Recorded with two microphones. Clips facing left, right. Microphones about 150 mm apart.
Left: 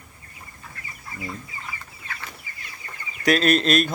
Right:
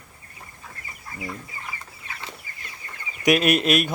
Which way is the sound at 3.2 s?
15° right (ahead or behind).